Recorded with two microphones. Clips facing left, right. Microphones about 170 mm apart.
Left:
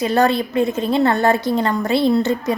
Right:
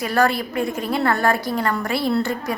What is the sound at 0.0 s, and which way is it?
A woman's voice, 20° left (ahead or behind).